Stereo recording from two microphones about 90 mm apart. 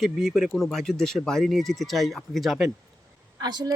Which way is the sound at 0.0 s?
Centre (ahead or behind).